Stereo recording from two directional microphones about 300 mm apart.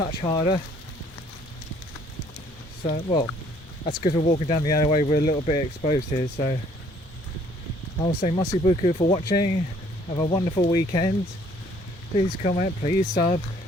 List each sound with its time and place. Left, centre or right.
0.2 s speech: centre
2.8 s speech: left
8.0 s speech: left
12.1 s speech: left